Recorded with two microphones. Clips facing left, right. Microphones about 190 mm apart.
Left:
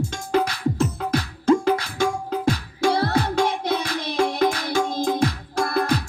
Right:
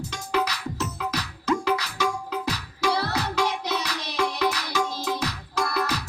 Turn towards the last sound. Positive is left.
turn(degrees=50)  # may be behind; listen again after turning